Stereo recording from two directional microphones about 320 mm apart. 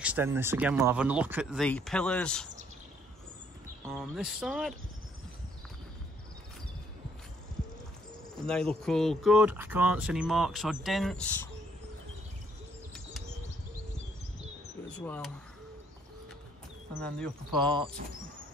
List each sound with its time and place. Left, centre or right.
0.0 s speech: centre
3.8 s speech: centre
8.5 s speech: centre
14.9 s speech: centre
17.0 s speech: centre